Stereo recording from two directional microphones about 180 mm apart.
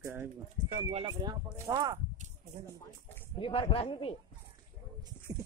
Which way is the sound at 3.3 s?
30° left (ahead or behind).